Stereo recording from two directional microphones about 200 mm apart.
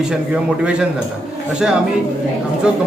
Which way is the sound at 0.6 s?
5° right (ahead or behind).